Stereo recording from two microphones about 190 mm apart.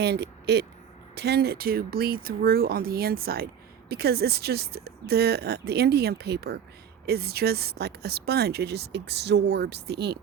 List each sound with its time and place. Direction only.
0.0 s speech: 60° right (ahead or behind)